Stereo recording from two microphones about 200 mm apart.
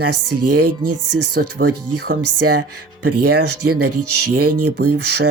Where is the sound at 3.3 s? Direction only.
50° right (ahead or behind).